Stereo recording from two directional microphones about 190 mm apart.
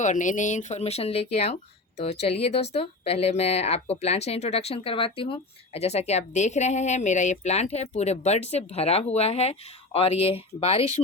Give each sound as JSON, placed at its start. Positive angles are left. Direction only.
{"t": 0.0, "sound": "speech", "side_deg": 40}